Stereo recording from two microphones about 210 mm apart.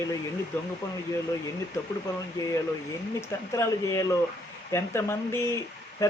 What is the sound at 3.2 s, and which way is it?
Speech, 15° left (ahead or behind).